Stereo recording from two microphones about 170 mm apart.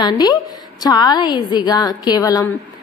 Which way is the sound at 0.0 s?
25° left (ahead or behind).